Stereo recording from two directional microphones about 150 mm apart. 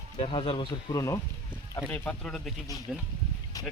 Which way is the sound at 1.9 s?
10° left (ahead or behind).